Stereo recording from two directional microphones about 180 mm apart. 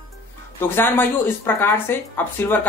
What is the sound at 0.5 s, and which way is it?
A woman's voice, 15° left (ahead or behind).